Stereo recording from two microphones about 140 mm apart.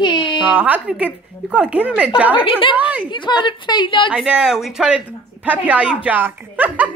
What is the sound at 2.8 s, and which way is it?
Speech, 10° right (ahead or behind).